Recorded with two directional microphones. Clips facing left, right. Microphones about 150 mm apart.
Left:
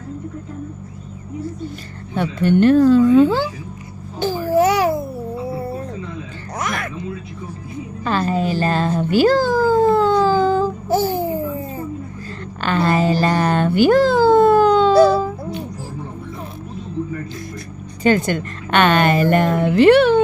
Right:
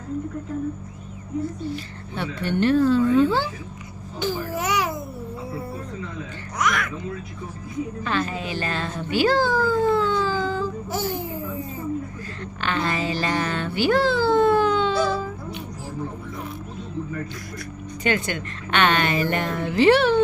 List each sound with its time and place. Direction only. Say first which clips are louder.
2.1 s a woman's voice: left 9 dB; 50° left (ahead or behind)
4.2 s babbling: left 10 dB; 30° left (ahead or behind)
6.6 s a sound: right 1 dB; 30° left (ahead or behind)
8.0 s speech: left 9 dB; 40° left (ahead or behind)
10.8 s babbling: left 8 dB; 30° left (ahead or behind)
12.5 s a sound: left 7 dB; 40° left (ahead or behind)
18.0 s a woman's voice: left 8 dB; 45° left (ahead or behind)